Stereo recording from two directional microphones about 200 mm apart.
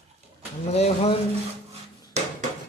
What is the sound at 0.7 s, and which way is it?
Speech, 30° left (ahead or behind).